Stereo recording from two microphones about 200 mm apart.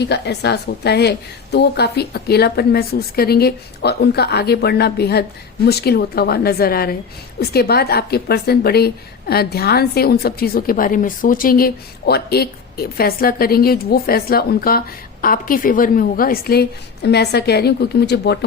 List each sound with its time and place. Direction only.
0.0 s a woman's voice: 55° left (ahead or behind)